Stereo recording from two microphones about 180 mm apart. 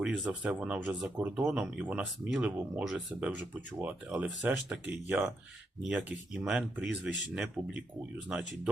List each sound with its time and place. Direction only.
0.0 s speech: 5° right (ahead or behind)